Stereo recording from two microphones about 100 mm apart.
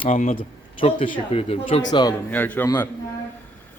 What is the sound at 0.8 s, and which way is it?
Speech, 60° left (ahead or behind).